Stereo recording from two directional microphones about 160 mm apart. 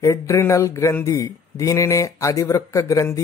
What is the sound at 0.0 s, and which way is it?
Speech, 15° left (ahead or behind).